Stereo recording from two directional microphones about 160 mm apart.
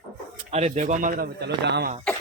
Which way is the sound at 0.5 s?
45° right (ahead or behind).